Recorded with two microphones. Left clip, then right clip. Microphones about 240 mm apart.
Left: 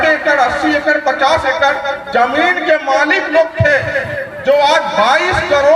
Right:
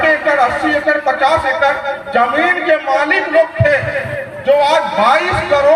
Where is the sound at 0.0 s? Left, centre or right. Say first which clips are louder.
Even; left.